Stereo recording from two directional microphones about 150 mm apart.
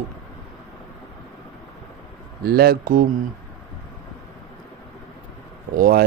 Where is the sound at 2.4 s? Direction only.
90° right.